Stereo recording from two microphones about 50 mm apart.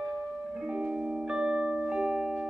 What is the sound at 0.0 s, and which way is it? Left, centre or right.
Music, centre.